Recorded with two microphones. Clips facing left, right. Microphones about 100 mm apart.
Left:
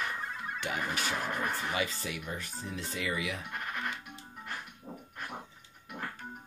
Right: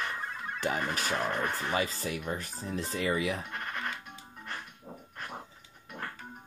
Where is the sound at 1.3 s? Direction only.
5° left (ahead or behind).